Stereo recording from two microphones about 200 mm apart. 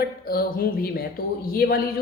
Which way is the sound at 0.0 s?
50° left (ahead or behind).